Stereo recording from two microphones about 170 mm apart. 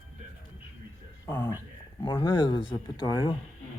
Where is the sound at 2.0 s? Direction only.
25° left (ahead or behind).